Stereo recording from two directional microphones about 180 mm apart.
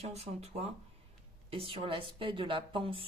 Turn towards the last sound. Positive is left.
turn(degrees=-30)  # may be behind; listen again after turning